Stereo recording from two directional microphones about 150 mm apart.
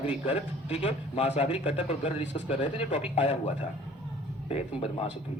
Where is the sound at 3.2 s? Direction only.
50° left (ahead or behind).